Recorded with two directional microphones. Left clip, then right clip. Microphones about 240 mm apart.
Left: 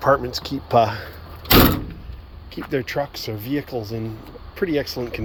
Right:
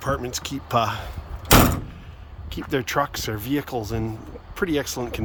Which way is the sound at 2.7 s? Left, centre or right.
Centre.